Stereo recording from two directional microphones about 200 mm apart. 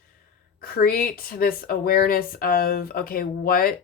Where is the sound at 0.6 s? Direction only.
50° left (ahead or behind).